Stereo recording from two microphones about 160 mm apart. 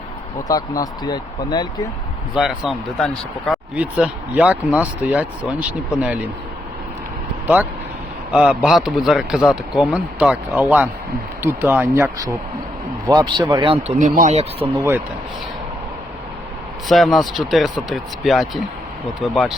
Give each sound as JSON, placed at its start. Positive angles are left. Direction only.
{"t": 0.4, "sound": "speech", "side_deg": 20}
{"t": 2.3, "sound": "speech", "side_deg": -5}
{"t": 7.4, "sound": "speech", "side_deg": -10}
{"t": 13.1, "sound": "speech", "side_deg": -25}
{"t": 14.0, "sound": "speech", "side_deg": -50}
{"t": 16.9, "sound": "speech", "side_deg": 0}